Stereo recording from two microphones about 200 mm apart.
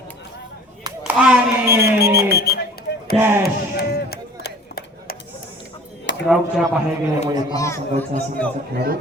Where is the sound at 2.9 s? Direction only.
60° left (ahead or behind).